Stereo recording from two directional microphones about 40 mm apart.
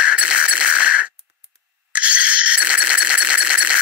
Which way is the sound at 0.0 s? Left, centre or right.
Right.